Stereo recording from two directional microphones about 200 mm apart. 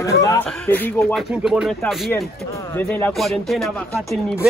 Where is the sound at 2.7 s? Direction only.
10° left (ahead or behind).